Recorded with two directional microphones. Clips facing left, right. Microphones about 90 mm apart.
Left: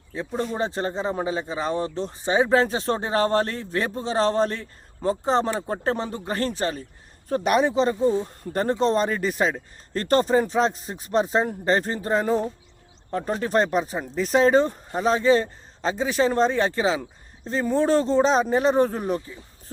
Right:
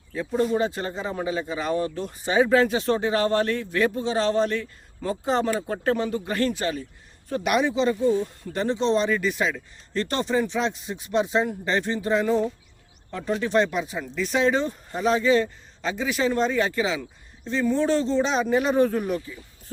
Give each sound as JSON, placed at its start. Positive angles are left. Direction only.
{"t": 0.1, "sound": "speech", "side_deg": 25}